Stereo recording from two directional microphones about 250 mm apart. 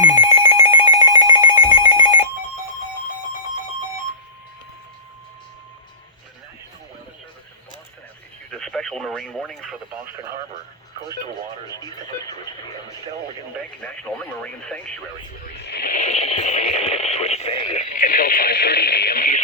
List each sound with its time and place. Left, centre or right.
0.0 s telephone: centre
8.4 s radio: centre
11.7 s speech: centre
13.8 s speech: centre
15.6 s radio: left